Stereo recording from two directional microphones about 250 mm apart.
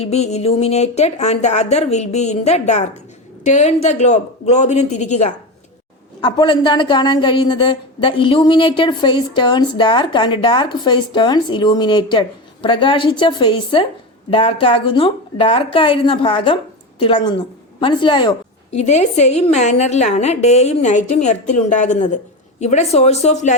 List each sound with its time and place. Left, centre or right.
0.0 s a woman's voice: left